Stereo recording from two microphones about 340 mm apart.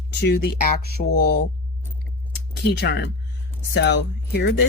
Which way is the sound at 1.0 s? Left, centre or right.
Left.